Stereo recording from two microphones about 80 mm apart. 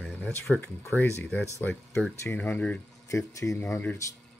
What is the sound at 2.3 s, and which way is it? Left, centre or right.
Speech, centre.